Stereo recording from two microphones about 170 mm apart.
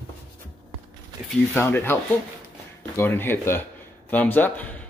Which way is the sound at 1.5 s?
15° left (ahead or behind).